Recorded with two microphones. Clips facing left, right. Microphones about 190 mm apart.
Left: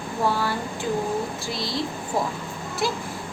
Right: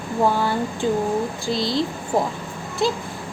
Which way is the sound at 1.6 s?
Centre (ahead or behind).